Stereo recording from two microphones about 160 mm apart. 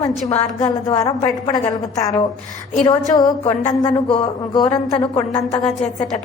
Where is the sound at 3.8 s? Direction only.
30° left (ahead or behind).